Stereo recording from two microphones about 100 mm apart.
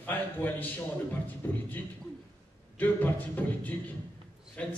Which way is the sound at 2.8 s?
15° left (ahead or behind).